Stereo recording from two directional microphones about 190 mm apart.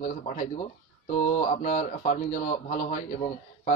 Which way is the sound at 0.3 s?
35° left (ahead or behind).